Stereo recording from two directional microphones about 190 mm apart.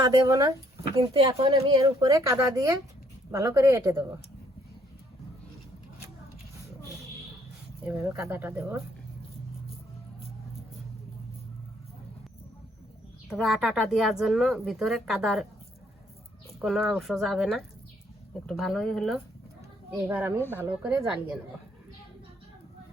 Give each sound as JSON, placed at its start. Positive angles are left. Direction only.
{"t": 0.0, "sound": "speech", "side_deg": -20}
{"t": 7.9, "sound": "speech", "side_deg": -10}
{"t": 13.2, "sound": "speech", "side_deg": 0}
{"t": 16.6, "sound": "speech", "side_deg": 0}
{"t": 19.9, "sound": "speech", "side_deg": -10}